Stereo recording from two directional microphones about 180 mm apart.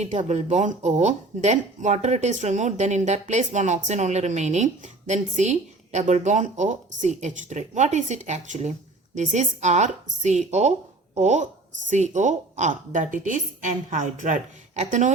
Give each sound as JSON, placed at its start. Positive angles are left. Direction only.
{"t": 0.0, "sound": "speech", "side_deg": -40}